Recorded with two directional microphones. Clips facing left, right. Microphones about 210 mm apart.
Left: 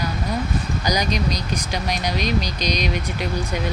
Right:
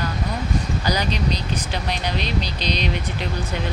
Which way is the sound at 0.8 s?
15° left (ahead or behind).